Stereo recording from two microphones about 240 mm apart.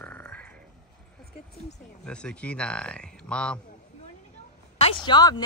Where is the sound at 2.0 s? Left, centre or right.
Centre.